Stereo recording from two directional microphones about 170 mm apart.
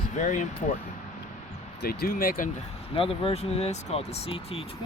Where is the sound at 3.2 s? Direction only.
35° left (ahead or behind).